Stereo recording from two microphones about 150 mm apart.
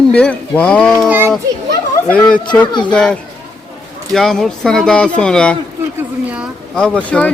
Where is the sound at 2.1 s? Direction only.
5° left (ahead or behind).